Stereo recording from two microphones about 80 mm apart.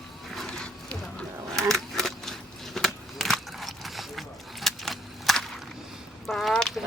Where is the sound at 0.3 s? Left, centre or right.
Centre.